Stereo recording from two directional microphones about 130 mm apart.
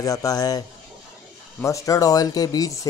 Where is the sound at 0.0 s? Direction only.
25° left (ahead or behind).